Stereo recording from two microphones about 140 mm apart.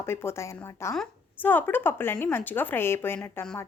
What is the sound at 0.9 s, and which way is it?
Speech, 10° left (ahead or behind).